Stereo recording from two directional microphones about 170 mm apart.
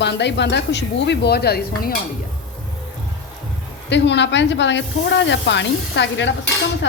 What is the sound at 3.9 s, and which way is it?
Stir, 90° left.